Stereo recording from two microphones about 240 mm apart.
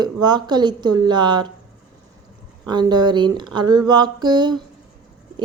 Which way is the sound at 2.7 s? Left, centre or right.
Centre.